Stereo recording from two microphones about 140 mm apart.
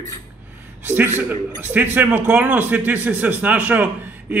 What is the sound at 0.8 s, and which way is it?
A man's voice, 15° right (ahead or behind).